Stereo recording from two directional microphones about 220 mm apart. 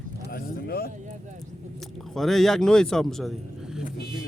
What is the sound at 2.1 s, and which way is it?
Speech, centre (ahead or behind).